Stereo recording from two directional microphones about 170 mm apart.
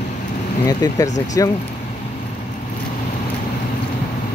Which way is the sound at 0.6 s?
20° left (ahead or behind).